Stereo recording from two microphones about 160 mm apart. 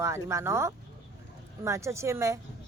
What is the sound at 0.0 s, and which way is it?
A woman's voice, 15° right (ahead or behind).